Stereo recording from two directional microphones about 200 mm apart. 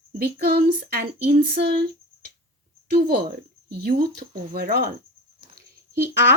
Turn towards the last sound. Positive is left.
turn(degrees=-10)  # may be behind; listen again after turning